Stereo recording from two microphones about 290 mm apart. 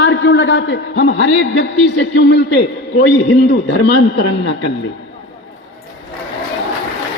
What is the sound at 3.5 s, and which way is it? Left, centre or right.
A man's voice, left.